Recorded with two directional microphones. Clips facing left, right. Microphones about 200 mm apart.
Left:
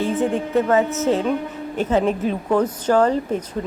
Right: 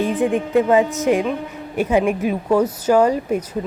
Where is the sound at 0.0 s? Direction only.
15° right (ahead or behind).